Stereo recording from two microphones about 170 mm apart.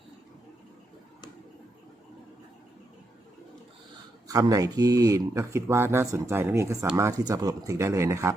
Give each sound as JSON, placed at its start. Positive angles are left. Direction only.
{"t": 4.3, "sound": "speech", "side_deg": -20}